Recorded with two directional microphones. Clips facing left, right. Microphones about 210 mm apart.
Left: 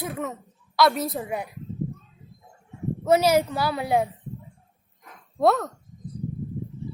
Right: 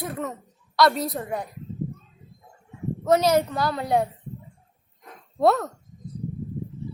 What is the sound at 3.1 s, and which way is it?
A woman's voice, 10° left (ahead or behind).